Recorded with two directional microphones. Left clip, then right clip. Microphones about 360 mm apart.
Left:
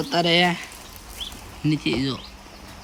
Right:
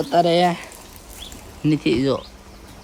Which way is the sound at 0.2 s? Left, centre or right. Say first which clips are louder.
Right 3 dB; centre.